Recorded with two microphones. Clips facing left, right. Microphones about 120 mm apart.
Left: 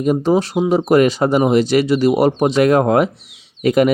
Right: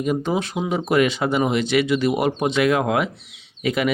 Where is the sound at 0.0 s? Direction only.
40° left (ahead or behind).